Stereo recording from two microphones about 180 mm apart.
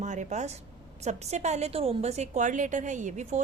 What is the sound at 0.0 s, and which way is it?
A woman's voice, 40° right (ahead or behind).